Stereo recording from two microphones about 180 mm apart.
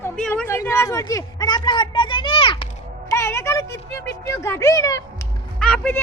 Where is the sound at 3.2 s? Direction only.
15° left (ahead or behind).